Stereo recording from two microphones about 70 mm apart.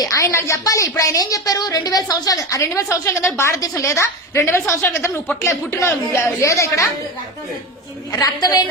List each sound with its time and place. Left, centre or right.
0.0 s a woman's voice: left
5.4 s a woman's voice: left
8.1 s a woman's voice: left